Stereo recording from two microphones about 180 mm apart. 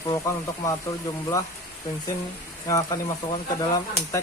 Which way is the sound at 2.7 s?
20° left (ahead or behind).